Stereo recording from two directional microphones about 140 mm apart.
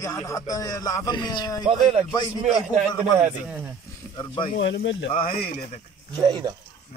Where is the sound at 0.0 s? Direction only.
25° left (ahead or behind).